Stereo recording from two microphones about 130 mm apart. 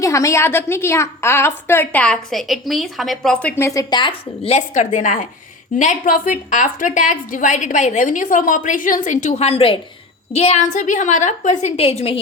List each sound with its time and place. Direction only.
0.0 s a woman's voice: 25° left (ahead or behind)
2.3 s a woman's voice: centre (ahead or behind)
3.8 s speech: 35° left (ahead or behind)
4.4 s a woman's voice: 60° left (ahead or behind)
5.7 s a woman's voice: 80° left; by 12.2 s 50° left (ahead or behind)